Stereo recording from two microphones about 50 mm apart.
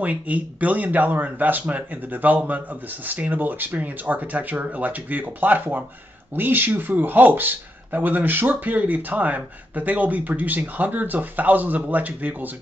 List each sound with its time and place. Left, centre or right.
0.0 s speech: right